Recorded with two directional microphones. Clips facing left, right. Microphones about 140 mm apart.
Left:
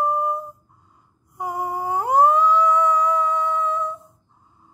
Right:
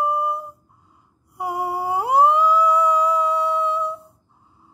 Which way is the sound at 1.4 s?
10° right (ahead or behind).